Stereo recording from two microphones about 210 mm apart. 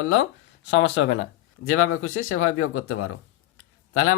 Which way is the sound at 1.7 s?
80° left.